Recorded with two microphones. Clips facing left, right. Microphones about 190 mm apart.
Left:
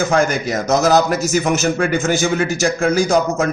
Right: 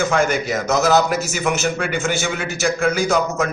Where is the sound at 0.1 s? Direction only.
40° left (ahead or behind).